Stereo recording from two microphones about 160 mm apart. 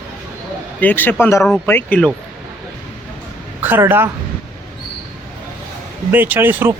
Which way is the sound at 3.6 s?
10° right (ahead or behind).